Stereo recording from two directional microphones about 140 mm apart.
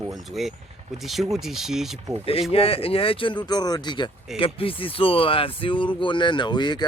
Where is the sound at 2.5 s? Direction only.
45° left (ahead or behind).